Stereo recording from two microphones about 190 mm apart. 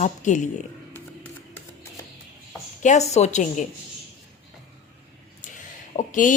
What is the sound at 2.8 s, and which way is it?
Speech, 35° left (ahead or behind).